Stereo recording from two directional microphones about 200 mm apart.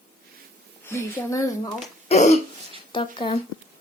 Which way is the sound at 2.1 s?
35° left (ahead or behind).